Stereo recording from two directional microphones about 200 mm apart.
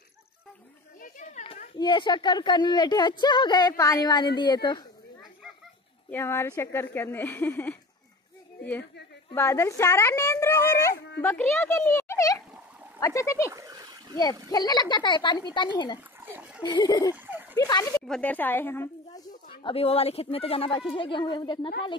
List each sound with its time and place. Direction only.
1.0 s a sound: 35° left (ahead or behind)
1.8 s speech: 25° left (ahead or behind)
6.0 s speech: 10° left (ahead or behind)
9.3 s speech: 15° left (ahead or behind)
13.5 s splash: 15° right (ahead or behind)
14.5 s speech: 20° left (ahead or behind)
16.2 s a sound: 10° right (ahead or behind)
16.6 s speech: 20° left (ahead or behind)
17.1 s a sound: 10° right (ahead or behind)
17.6 s speech: 20° left (ahead or behind)
18.0 s speech: 5° left (ahead or behind)
19.5 s speech: 25° left (ahead or behind)